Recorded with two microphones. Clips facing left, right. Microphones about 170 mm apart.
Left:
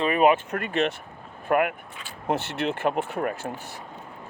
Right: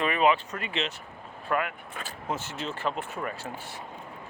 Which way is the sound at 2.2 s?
65° left (ahead or behind).